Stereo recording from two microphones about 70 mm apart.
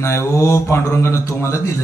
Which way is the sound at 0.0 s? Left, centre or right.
Left.